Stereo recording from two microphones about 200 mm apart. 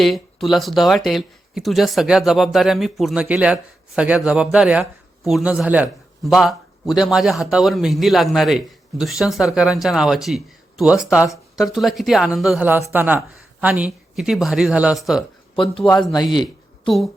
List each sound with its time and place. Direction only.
0.0 s speech: centre (ahead or behind)
15.6 s speech: 25° left (ahead or behind)